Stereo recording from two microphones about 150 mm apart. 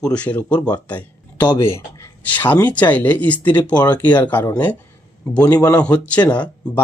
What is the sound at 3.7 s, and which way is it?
Speech, 30° left (ahead or behind).